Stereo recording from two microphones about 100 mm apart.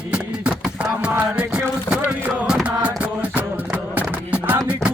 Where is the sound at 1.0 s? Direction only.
10° right (ahead or behind).